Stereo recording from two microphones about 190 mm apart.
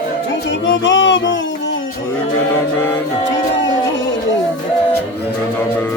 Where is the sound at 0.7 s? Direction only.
75° left (ahead or behind).